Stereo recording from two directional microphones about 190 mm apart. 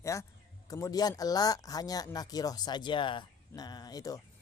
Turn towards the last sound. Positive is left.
turn(degrees=20)  # may be behind; listen again after turning